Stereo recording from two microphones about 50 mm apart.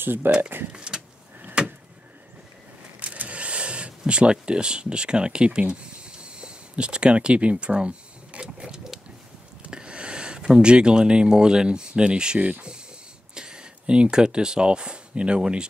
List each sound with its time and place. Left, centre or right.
0.0 s speech: right
0.7 s power windows: centre
1.6 s vehicle: centre
3.0 s a sound: right; by 9.0 s centre
9.7 s speech: centre
13.3 s a sound: centre
14.1 s speech: centre